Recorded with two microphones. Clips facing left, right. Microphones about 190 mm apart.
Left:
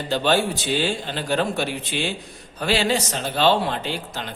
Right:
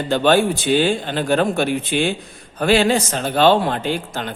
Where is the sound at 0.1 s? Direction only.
55° right (ahead or behind).